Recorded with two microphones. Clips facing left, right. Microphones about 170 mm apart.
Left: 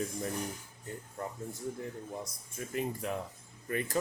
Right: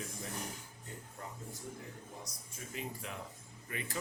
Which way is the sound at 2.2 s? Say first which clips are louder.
Left 7 dB; 50° left (ahead or behind).